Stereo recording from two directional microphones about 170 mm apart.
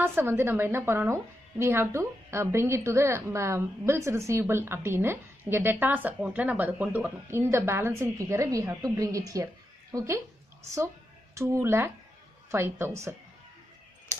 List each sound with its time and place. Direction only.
0.0 s a woman's voice: 15° right (ahead or behind)